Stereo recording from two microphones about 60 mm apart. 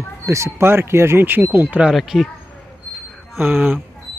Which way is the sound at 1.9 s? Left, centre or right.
Centre.